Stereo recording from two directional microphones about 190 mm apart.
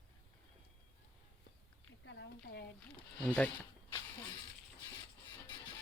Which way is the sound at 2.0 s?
65° left (ahead or behind).